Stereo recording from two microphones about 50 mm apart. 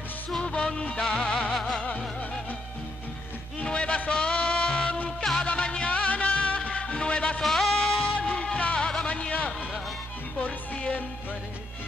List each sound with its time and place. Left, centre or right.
0.4 s music: left
3.6 s music: left
7.4 s music: centre
8.2 s music: left
9.0 s a sound: left
10.4 s music: left